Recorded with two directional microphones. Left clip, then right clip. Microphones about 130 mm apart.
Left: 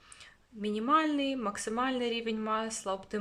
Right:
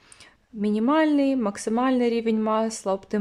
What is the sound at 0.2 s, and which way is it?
Speech, 45° right (ahead or behind).